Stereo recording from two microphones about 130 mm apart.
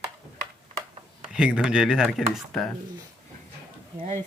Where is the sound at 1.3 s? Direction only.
5° right (ahead or behind).